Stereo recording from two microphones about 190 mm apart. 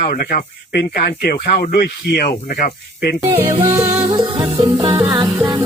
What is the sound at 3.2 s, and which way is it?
Music, 15° right (ahead or behind).